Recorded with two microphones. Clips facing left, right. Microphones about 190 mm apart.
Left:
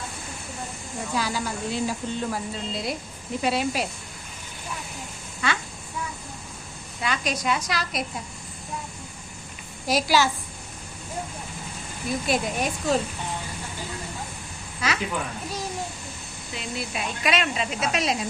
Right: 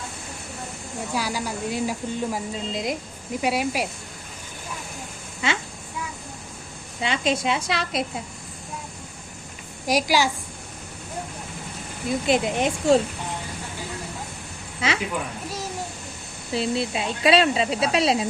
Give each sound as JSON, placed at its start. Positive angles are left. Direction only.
{"t": 1.1, "sound": "speech", "side_deg": -10}
{"t": 5.4, "sound": "a woman's voice", "side_deg": -20}
{"t": 7.0, "sound": "a woman's voice", "side_deg": -25}
{"t": 9.8, "sound": "speech", "side_deg": -15}
{"t": 12.2, "sound": "a woman's voice", "side_deg": -20}
{"t": 14.8, "sound": "a woman's voice", "side_deg": -25}
{"t": 16.5, "sound": "speech", "side_deg": -30}